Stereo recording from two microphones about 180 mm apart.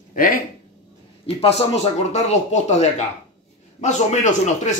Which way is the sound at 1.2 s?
35° left (ahead or behind).